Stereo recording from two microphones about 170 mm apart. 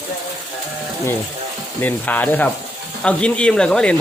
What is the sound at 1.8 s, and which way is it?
Speech, 10° left (ahead or behind).